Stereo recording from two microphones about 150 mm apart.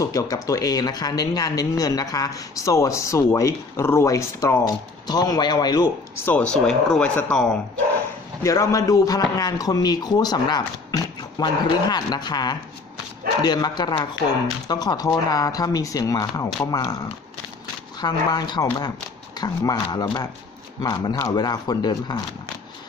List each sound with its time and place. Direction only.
0.0 s speech: 25° left (ahead or behind)
6.2 s speech: 10° left (ahead or behind)
8.4 s speech: 20° left (ahead or behind)